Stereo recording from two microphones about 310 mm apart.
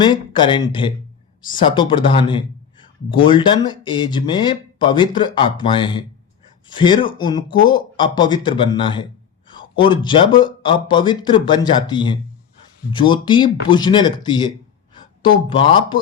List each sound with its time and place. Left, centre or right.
0.0 s speech: centre